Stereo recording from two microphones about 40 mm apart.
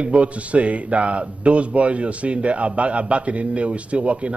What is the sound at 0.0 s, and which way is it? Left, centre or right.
A man's voice, right.